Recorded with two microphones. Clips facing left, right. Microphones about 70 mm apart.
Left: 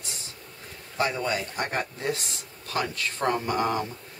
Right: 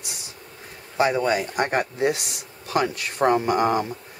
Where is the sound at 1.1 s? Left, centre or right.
Right.